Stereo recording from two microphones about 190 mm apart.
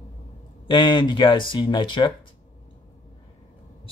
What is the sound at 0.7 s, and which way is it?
Speech, 25° left (ahead or behind).